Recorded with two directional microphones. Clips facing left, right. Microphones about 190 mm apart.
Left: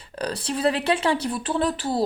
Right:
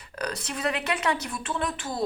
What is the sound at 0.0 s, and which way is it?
Speech, 30° left (ahead or behind).